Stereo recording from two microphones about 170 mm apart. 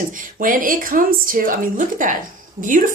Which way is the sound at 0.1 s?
50° right (ahead or behind).